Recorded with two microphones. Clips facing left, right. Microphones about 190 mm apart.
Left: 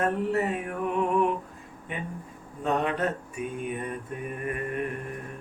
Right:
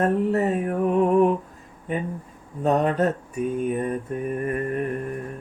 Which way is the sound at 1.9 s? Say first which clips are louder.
Right 8 dB; 40° right (ahead or behind).